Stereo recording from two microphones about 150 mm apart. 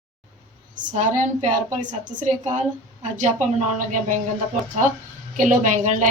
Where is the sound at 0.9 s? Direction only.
55° right (ahead or behind).